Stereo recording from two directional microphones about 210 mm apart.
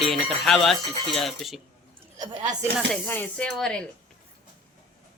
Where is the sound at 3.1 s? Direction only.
5° left (ahead or behind).